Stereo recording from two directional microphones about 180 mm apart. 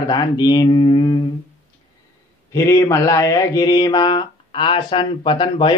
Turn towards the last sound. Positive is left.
turn(degrees=30)  # may be behind; listen again after turning